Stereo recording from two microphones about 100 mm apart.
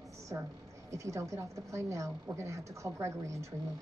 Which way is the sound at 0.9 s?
30° right (ahead or behind).